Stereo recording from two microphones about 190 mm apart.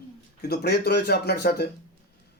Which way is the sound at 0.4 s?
55° left (ahead or behind).